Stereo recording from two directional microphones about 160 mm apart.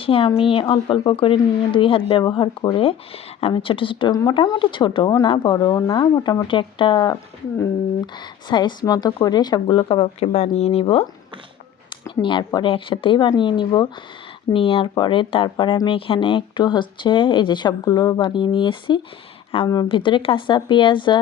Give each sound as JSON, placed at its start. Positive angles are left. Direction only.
{"t": 0.0, "sound": "a woman's voice", "side_deg": 35}
{"t": 12.2, "sound": "a woman's voice", "side_deg": 30}